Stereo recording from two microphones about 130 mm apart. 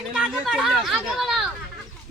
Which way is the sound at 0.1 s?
5° right (ahead or behind).